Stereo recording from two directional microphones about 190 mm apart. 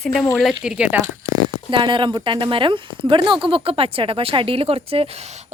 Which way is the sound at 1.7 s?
25° right (ahead or behind).